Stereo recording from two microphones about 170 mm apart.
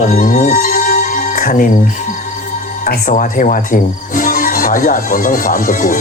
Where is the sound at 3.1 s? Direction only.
50° left (ahead or behind).